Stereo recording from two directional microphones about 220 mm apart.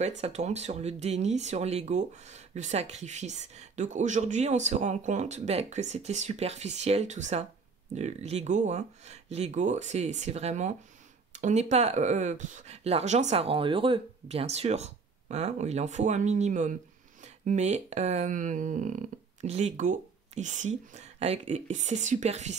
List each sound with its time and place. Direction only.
0.0 s speech: 30° right (ahead or behind)